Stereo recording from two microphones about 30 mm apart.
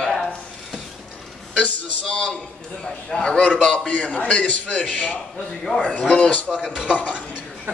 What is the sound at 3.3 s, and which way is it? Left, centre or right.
A man's voice, left.